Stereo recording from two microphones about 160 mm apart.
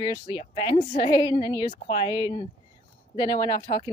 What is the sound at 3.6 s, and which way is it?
Speech, 50° left (ahead or behind).